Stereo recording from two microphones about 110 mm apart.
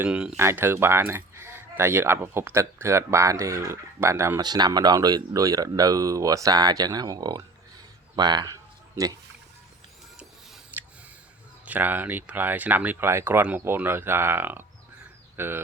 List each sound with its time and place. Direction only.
0.0 s speech: 10° right (ahead or behind)
0.3 s speech: 20° right (ahead or behind)
4.4 s speech: 40° right (ahead or behind)
8.1 s a sound: 40° right (ahead or behind)
10.7 s a sound: 20° right (ahead or behind)
11.6 s speech: 15° right (ahead or behind)